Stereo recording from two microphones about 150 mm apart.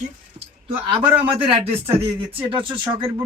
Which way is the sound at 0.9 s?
35° right (ahead or behind).